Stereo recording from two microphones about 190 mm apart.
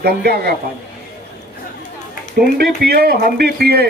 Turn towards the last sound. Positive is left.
turn(degrees=-55)  # may be behind; listen again after turning